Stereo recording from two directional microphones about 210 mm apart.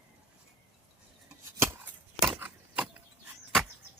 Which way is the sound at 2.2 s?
5° right (ahead or behind).